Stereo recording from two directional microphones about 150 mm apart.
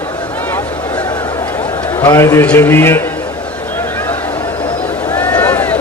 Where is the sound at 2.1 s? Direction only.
20° left (ahead or behind).